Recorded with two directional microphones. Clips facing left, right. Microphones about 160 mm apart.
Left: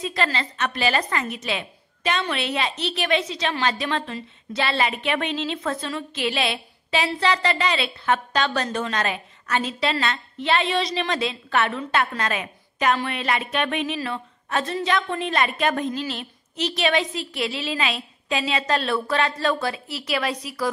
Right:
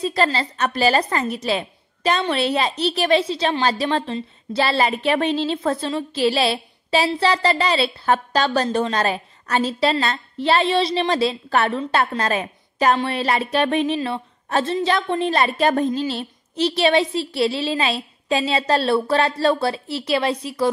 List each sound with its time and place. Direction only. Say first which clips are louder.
0.0 s a woman's voice: right 5 dB; 35° right (ahead or behind)